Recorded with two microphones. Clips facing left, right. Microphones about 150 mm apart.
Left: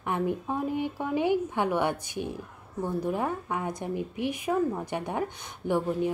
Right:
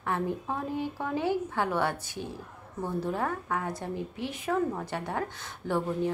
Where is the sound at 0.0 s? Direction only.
15° left (ahead or behind).